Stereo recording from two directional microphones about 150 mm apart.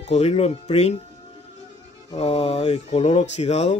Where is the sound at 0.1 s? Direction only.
45° left (ahead or behind).